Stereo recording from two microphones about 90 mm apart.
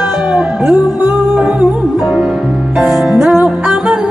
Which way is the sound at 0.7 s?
45° left (ahead or behind).